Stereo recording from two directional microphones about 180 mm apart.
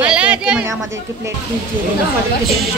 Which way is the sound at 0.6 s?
15° right (ahead or behind).